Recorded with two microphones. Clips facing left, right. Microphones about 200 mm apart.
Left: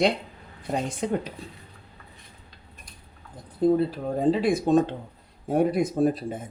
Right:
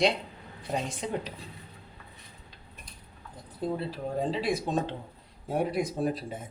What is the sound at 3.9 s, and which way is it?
Speech, 50° left (ahead or behind).